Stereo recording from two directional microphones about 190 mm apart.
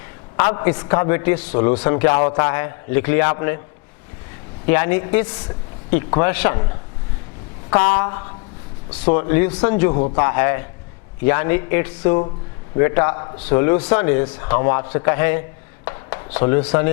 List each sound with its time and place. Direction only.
0.8 s a man's voice: 15° left (ahead or behind)
4.6 s a man's voice: 15° left (ahead or behind)
7.9 s a man's voice: 15° left (ahead or behind)